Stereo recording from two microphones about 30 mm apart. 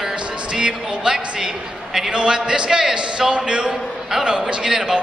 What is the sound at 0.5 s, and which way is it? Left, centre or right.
Speech, right.